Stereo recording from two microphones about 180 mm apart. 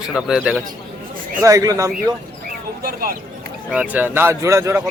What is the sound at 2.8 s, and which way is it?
Speech, 55° right (ahead or behind).